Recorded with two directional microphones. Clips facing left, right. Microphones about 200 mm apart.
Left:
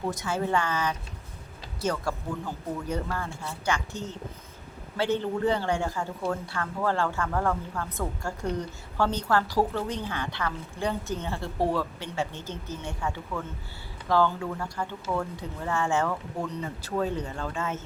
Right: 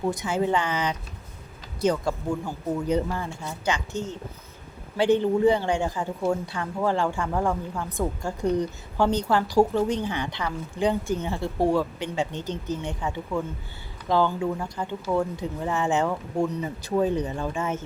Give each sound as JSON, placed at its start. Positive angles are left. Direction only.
{"t": 0.1, "sound": "a woman's voice", "side_deg": -15}
{"t": 4.9, "sound": "a woman's voice", "side_deg": -15}